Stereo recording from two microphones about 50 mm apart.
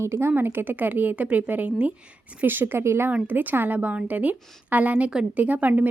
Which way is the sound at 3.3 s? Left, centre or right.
Right.